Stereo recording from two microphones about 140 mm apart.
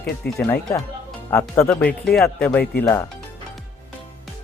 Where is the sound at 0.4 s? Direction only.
20° left (ahead or behind).